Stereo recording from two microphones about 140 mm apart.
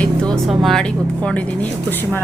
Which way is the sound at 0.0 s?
5° left (ahead or behind).